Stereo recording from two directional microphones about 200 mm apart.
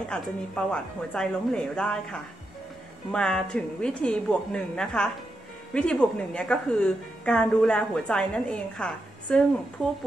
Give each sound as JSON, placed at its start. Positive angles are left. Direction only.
{"t": 0.1, "sound": "a woman's voice", "side_deg": 5}